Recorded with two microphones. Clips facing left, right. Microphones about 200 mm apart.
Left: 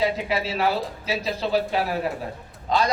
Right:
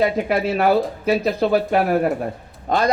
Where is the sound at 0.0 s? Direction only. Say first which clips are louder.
Right 5 dB; 55° right (ahead or behind).